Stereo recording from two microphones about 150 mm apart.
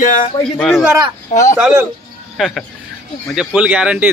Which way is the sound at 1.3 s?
55° left (ahead or behind).